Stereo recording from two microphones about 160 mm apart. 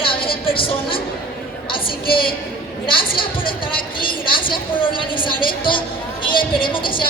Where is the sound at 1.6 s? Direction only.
30° left (ahead or behind).